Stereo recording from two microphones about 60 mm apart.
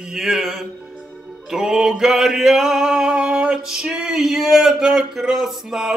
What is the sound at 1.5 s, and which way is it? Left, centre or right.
Male singing, centre.